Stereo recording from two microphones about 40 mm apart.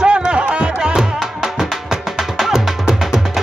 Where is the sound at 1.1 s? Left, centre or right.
Centre.